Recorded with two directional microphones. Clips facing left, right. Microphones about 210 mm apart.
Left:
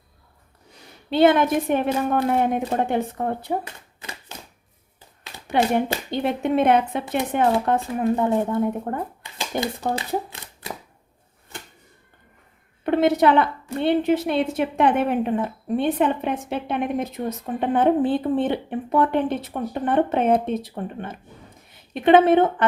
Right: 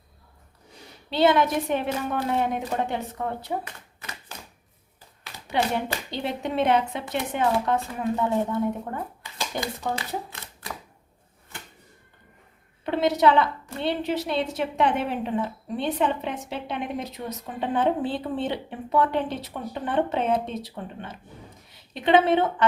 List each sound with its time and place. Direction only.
1.1 s a woman's voice: 50° left (ahead or behind)
5.5 s a woman's voice: 55° left (ahead or behind)
12.8 s a woman's voice: 55° left (ahead or behind)